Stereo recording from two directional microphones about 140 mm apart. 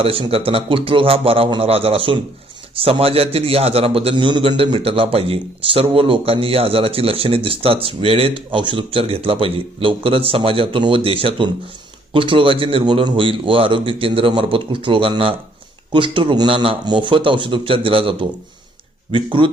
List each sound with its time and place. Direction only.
0.0 s a man's voice: 40° right (ahead or behind)